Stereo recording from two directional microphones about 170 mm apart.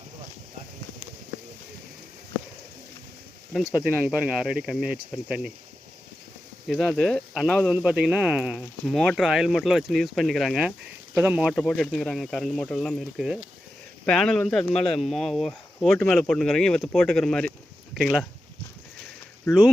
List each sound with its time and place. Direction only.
4.0 s speech: 5° right (ahead or behind)
6.7 s speech: centre (ahead or behind)
11.1 s speech: 10° right (ahead or behind)
11.5 s speech: 5° left (ahead or behind)
19.5 s speech: 10° left (ahead or behind)